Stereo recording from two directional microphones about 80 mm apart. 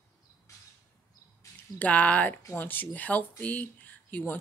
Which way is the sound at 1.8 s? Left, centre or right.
Centre.